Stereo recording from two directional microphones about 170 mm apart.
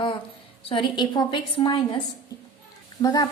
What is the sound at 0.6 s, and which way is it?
Speech, 30° left (ahead or behind).